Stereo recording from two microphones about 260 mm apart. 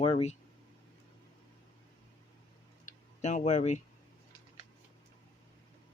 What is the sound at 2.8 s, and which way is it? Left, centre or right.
Tick-tock, left.